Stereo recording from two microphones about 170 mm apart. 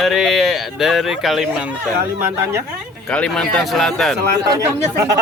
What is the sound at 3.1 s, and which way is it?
Speech, 5° left (ahead or behind).